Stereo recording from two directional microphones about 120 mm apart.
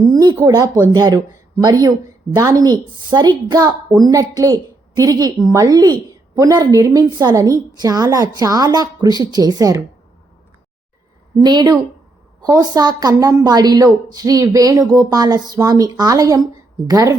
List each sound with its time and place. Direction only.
0.0 s a woman's voice: 35° right (ahead or behind)
11.3 s a woman's voice: 35° right (ahead or behind)